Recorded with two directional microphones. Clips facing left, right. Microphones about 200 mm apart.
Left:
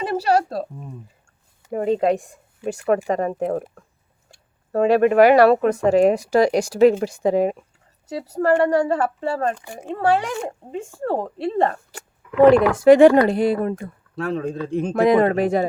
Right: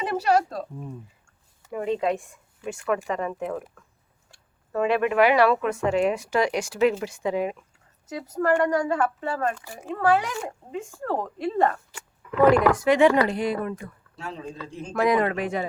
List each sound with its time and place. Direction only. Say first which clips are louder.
0.0 s a sound: left 3 dB; 30° left (ahead or behind)
1.7 s speech: left 6 dB; 40° left (ahead or behind)
14.2 s speech: left 11 dB; 60° left (ahead or behind)
15.0 s speech: left 6 dB; 25° left (ahead or behind)
15.3 s speech: left 8 dB; 35° left (ahead or behind)